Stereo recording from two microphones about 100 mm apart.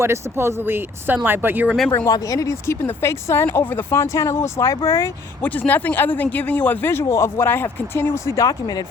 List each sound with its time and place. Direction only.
0.0 s speech: 25° right (ahead or behind)
2.0 s speech: 35° left (ahead or behind)
5.5 s speech: 15° left (ahead or behind); by 8.8 s 40° left (ahead or behind)